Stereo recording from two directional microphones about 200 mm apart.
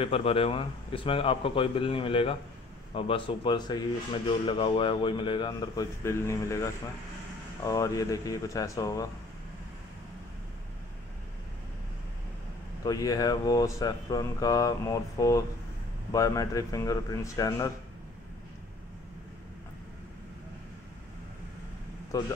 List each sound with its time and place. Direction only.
0.0 s speech: 30° left (ahead or behind)
12.8 s speech: 20° left (ahead or behind)
22.1 s speech: 15° left (ahead or behind)